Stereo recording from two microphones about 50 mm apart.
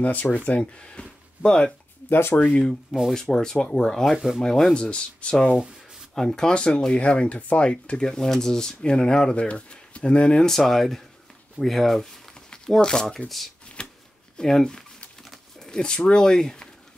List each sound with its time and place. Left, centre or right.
0.0 s speech: left
0.5 s speech: left
2.0 s speech: left
2.3 s speech: left
2.6 s speech: centre; by 10.4 s left
10.4 s speech: centre
13.8 s shuffling cards: centre
14.3 s speech: centre